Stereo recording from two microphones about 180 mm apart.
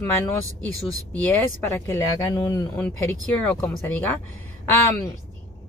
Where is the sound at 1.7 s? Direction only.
10° left (ahead or behind).